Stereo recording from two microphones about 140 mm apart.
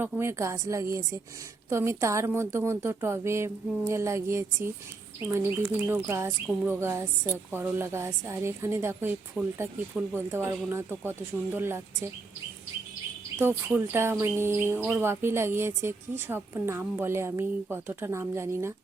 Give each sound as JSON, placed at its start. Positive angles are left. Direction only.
{"t": 0.0, "sound": "speech", "side_deg": -15}
{"t": 5.9, "sound": "speech", "side_deg": -20}
{"t": 13.4, "sound": "speech", "side_deg": -15}